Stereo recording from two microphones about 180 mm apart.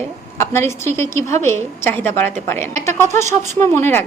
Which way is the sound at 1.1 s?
40° right (ahead or behind).